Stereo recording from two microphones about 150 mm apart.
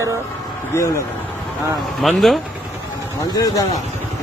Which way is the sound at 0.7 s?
20° left (ahead or behind).